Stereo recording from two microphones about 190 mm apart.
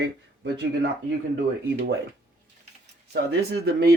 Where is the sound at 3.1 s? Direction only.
65° right (ahead or behind).